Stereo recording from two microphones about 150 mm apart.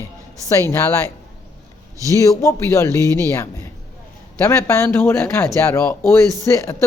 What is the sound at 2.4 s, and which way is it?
Speech, 20° left (ahead or behind).